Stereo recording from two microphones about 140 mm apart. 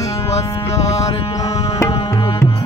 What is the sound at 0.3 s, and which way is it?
Music, 50° left (ahead or behind).